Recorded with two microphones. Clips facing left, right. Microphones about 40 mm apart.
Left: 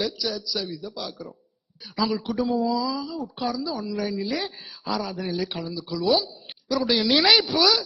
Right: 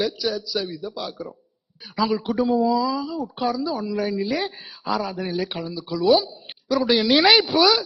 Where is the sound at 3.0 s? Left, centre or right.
Centre.